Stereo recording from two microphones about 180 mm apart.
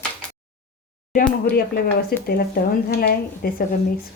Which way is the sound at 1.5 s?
55° left (ahead or behind).